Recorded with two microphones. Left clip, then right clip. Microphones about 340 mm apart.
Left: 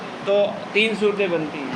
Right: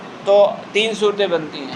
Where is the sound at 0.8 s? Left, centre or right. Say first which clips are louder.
Right 1 dB; centre.